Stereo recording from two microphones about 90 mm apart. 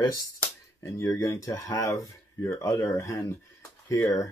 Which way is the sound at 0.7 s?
30° left (ahead or behind).